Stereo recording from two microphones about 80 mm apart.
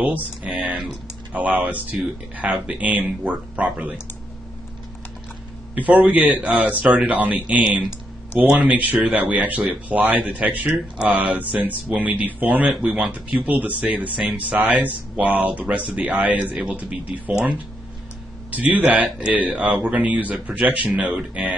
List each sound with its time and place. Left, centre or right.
0.0 s speech: centre
5.8 s speech: centre
18.5 s speech: centre